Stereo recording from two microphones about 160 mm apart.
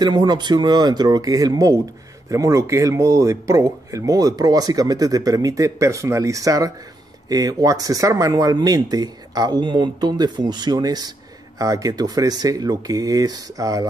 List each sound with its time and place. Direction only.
0.0 s speech: 25° right (ahead or behind)